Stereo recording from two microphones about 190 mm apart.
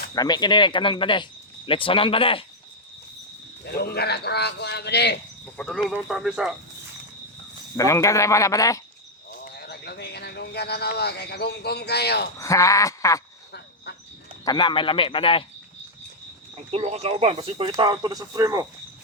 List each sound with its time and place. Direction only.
0.1 s speech: 20° left (ahead or behind)
3.7 s speech: 55° left (ahead or behind)
5.5 s speech: 5° left (ahead or behind)
7.8 s a man's voice: 15° left (ahead or behind)
9.4 s speech: 55° left (ahead or behind)
12.4 s a man's voice: 15° left (ahead or behind)
14.4 s speech: 25° left (ahead or behind)
16.7 s speech: 35° right (ahead or behind)
17.3 s speech: 25° right (ahead or behind)